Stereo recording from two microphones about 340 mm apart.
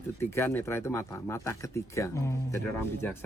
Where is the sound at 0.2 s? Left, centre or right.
Centre.